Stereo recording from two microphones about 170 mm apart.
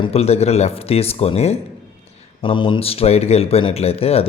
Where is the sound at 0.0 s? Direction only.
35° left (ahead or behind).